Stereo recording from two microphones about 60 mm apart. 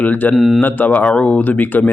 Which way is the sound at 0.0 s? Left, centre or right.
Left.